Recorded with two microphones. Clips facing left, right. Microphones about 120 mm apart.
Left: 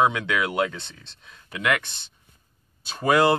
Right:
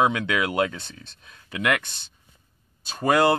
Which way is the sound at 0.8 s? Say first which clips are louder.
Even; 30° left (ahead or behind).